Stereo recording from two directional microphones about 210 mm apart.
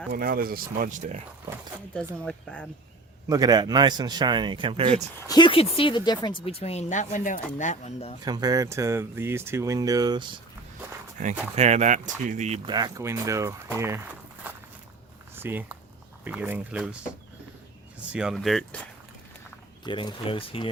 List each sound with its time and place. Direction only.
0.1 s speech: 45° right (ahead or behind)
2.2 s speech: 5° left (ahead or behind)
3.2 s a man's voice: 15° right (ahead or behind)
5.3 s speech: 25° left (ahead or behind)
8.2 s speech: 20° right (ahead or behind)
11.5 s speech: 30° right (ahead or behind)
12.6 s speech: 20° right (ahead or behind)
15.4 s speech: 10° right (ahead or behind)
19.8 s speech: 20° left (ahead or behind)